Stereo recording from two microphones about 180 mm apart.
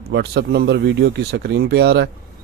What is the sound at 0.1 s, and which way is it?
A man's voice, 65° right (ahead or behind).